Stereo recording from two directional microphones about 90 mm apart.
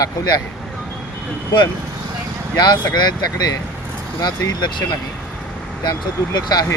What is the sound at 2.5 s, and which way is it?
Speech, 50° left (ahead or behind).